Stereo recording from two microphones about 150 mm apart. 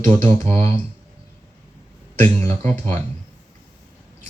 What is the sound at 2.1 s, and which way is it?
Speech, 15° left (ahead or behind).